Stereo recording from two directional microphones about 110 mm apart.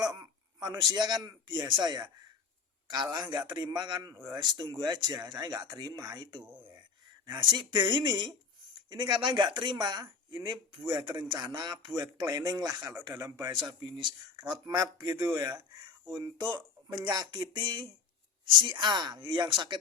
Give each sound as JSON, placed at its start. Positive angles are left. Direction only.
{"t": 0.0, "sound": "a sound", "side_deg": -35}
{"t": 1.6, "sound": "speech", "side_deg": -40}
{"t": 6.4, "sound": "speech", "side_deg": -15}
{"t": 7.3, "sound": "speech", "side_deg": -45}